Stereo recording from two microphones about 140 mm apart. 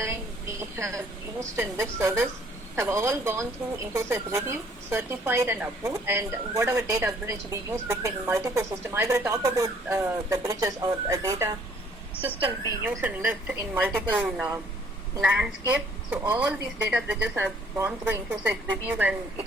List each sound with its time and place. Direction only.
0.0 s a woman's voice: 20° right (ahead or behind)
12.6 s a woman's voice: 15° right (ahead or behind)